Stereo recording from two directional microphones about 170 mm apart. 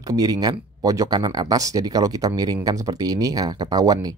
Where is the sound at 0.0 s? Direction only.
20° right (ahead or behind).